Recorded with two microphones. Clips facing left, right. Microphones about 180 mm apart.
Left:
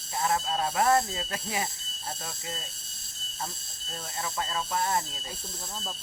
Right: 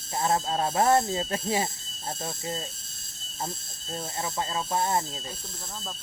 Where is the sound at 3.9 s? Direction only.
25° right (ahead or behind).